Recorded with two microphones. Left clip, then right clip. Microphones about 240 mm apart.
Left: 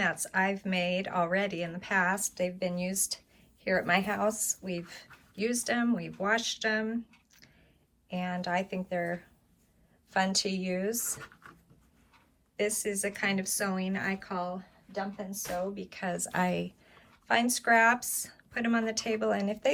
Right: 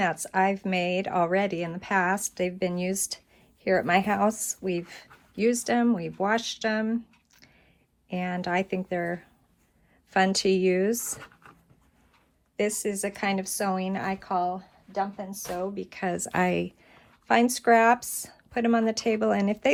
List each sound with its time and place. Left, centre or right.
0.0 s speech: right
8.1 s speech: right
10.1 s speech: right
12.5 s speech: right